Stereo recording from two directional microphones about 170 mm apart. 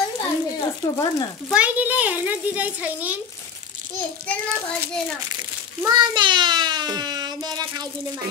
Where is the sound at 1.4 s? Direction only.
10° right (ahead or behind).